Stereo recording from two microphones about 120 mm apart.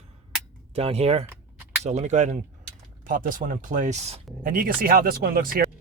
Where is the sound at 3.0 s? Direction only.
90° right; by 4.2 s 65° right (ahead or behind).